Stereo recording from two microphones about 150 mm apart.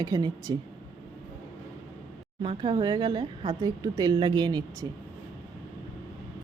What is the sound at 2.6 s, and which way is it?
A woman's voice, 25° right (ahead or behind).